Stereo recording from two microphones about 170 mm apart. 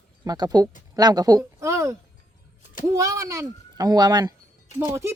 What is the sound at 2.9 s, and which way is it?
Speech, 20° right (ahead or behind).